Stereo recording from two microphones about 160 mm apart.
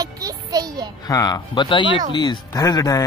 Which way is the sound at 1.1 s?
25° left (ahead or behind).